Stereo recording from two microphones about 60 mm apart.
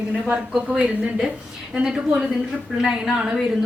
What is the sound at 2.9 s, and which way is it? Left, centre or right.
Speech, centre.